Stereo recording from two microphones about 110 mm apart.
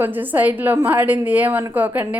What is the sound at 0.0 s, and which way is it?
A woman's voice, 15° right (ahead or behind).